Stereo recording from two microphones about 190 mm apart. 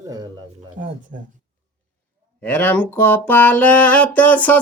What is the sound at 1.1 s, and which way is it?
Speech, 50° right (ahead or behind).